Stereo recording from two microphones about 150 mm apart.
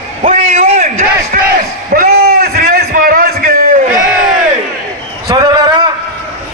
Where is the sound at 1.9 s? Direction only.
80° right.